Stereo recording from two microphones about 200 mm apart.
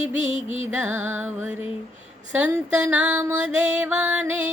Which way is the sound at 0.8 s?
10° right (ahead or behind).